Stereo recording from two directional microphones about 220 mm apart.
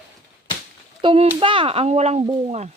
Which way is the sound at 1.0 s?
25° right (ahead or behind).